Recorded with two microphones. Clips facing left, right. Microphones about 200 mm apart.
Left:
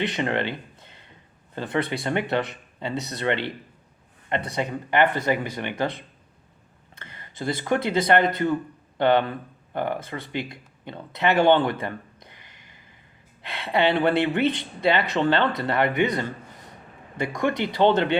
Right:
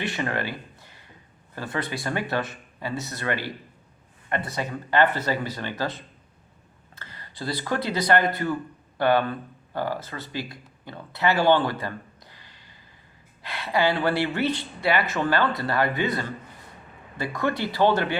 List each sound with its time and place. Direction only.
0.0 s a sound: 20° left (ahead or behind)
1.5 s speech: 20° left (ahead or behind)
7.0 s speech: 20° left (ahead or behind)